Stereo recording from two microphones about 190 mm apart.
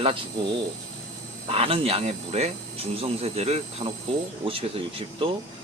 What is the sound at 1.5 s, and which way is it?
Speech, 30° right (ahead or behind).